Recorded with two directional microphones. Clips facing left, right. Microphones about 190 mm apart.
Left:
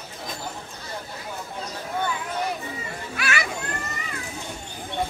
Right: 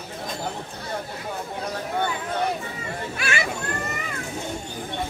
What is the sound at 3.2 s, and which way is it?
Children playing, 30° right (ahead or behind).